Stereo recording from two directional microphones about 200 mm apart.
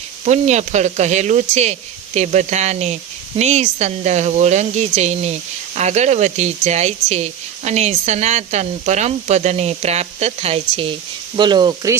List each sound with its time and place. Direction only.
0.3 s speech: 35° right (ahead or behind); by 11.9 s 20° right (ahead or behind)